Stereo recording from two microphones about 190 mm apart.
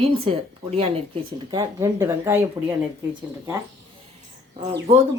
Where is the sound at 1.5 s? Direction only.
20° right (ahead or behind).